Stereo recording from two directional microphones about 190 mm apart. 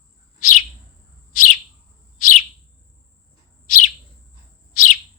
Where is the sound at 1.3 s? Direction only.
45° left (ahead or behind).